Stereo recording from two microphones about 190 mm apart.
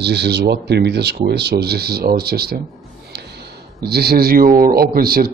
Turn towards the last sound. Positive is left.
turn(degrees=-50)  # may be behind; listen again after turning